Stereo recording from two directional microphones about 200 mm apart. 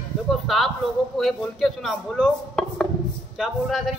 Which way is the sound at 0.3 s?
Centre (ahead or behind).